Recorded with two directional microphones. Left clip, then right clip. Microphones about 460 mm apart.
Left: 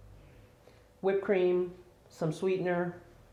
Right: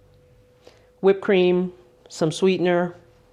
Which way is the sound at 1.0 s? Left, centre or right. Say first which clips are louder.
Right 10 dB; right.